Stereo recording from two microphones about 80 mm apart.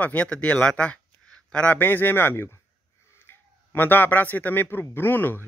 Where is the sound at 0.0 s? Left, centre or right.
Centre.